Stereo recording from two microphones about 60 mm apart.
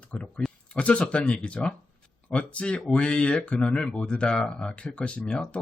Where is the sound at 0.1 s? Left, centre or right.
Centre.